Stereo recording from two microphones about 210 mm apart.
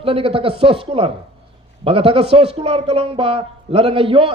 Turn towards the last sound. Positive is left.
turn(degrees=-25)  # may be behind; listen again after turning